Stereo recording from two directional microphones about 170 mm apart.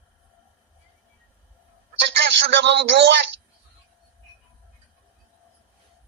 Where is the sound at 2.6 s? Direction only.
90° right.